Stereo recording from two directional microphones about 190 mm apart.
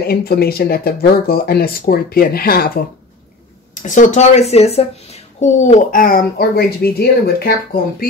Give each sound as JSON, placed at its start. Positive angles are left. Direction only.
{"t": 0.0, "sound": "speech", "side_deg": 55}